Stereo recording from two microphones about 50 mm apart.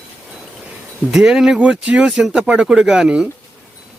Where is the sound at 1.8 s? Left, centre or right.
Right.